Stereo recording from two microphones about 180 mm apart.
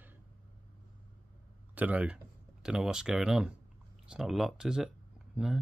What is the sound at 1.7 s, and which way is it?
Speech, 10° right (ahead or behind).